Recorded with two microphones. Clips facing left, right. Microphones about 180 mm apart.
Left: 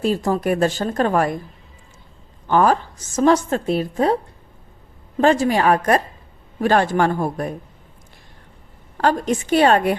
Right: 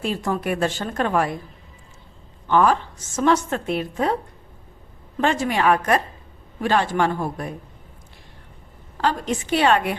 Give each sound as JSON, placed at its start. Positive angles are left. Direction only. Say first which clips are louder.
{"t": 0.0, "sound": "speech", "louder": "left 5 dB", "side_deg": 35}
{"t": 2.5, "sound": "a woman's voice", "louder": "left 2 dB", "side_deg": 40}
{"t": 9.0, "sound": "a woman's voice", "louder": "left 4 dB", "side_deg": 45}